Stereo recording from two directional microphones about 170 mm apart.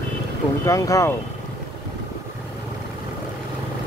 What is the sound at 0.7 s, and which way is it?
Speech, 20° left (ahead or behind).